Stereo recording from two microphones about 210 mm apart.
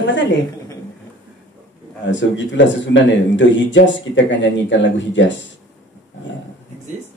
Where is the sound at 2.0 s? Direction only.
60° left (ahead or behind).